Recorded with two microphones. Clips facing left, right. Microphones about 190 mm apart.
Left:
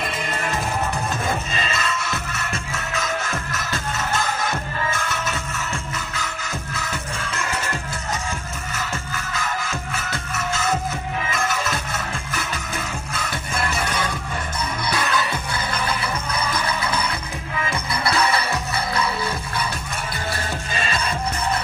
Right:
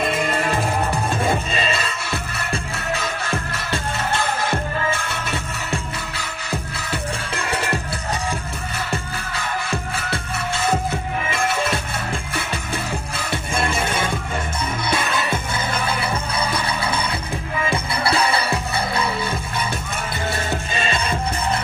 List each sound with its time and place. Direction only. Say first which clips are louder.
1.1 s music: right 4 dB; 30° right (ahead or behind)
8.7 s music: right 2 dB; 30° right (ahead or behind)
13.1 s music: right 1 dB; 30° right (ahead or behind)
20.3 s music: right 3 dB; 25° right (ahead or behind)